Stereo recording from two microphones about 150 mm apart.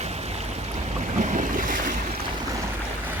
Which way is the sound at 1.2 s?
55° right (ahead or behind).